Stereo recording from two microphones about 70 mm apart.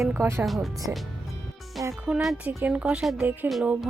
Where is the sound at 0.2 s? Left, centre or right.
Right.